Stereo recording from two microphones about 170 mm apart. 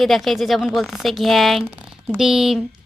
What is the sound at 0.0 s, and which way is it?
A woman's voice, centre (ahead or behind).